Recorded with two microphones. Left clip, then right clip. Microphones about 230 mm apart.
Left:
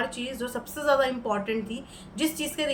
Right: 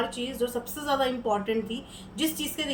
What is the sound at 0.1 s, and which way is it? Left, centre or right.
A woman's voice, centre.